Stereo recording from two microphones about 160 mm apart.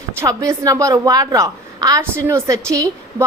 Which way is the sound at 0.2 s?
20° right (ahead or behind).